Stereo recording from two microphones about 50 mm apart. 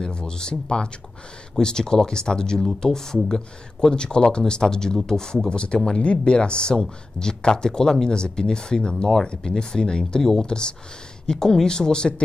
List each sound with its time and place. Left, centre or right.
0.0 s speech: centre